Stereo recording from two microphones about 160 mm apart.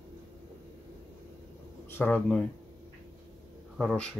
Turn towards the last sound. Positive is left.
turn(degrees=0)  # may be behind; listen again after turning